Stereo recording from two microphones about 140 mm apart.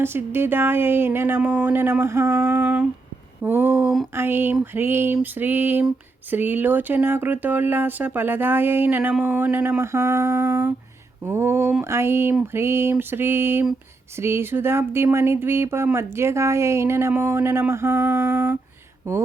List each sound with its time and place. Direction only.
0.0 s speech: 15° right (ahead or behind)
2.5 s speech: 10° right (ahead or behind)